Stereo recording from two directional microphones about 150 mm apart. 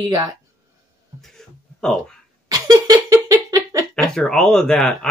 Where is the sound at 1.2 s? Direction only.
5° left (ahead or behind).